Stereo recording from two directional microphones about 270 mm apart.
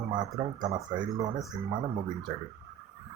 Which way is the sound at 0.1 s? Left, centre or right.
Centre.